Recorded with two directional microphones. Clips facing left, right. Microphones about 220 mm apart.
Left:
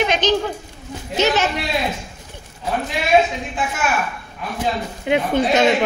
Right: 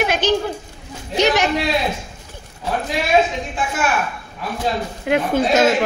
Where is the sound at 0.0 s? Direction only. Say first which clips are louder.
Even; 10° right (ahead or behind).